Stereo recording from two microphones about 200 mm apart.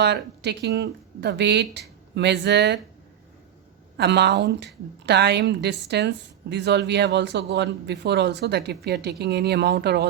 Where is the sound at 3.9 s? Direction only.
60° right (ahead or behind).